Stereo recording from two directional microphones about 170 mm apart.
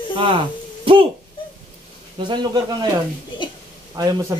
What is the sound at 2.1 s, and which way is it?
Speech, 25° right (ahead or behind).